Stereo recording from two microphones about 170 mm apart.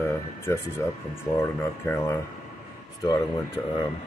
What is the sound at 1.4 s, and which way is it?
Speech, 15° left (ahead or behind).